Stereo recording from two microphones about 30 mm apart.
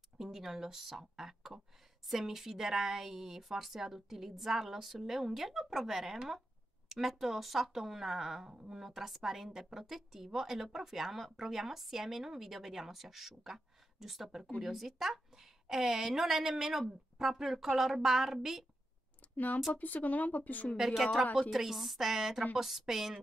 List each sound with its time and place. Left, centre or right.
0.2 s a woman's voice: centre
8.5 s a woman's voice: right
8.7 s a woman's voice: centre
19.3 s speech: left
20.7 s a woman's voice: centre